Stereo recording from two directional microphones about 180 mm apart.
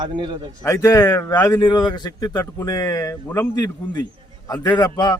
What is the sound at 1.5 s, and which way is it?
A man's voice, 25° left (ahead or behind).